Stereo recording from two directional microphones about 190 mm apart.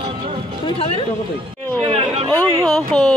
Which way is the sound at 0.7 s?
30° left (ahead or behind).